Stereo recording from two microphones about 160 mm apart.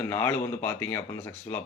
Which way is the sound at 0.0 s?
15° left (ahead or behind).